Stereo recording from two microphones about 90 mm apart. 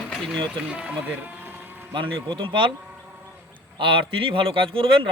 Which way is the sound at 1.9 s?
70° right (ahead or behind).